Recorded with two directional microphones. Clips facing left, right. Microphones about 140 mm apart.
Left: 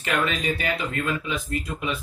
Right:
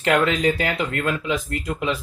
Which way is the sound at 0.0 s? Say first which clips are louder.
Right 7 dB; 90° right.